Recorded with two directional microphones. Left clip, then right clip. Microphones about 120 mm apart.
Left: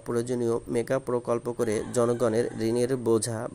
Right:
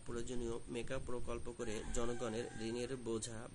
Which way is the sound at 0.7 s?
35° left (ahead or behind).